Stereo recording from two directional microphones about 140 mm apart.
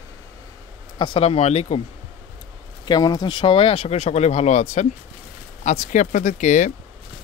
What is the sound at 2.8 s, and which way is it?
Speech, 30° left (ahead or behind).